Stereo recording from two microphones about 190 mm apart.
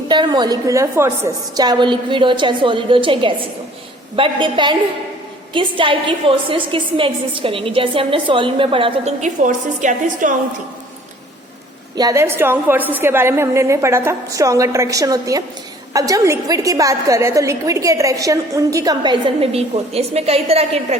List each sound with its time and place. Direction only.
0.1 s a woman's voice: 25° right (ahead or behind); by 10.3 s 45° right (ahead or behind)
11.9 s a woman's voice: 15° right (ahead or behind); by 21.0 s 35° right (ahead or behind)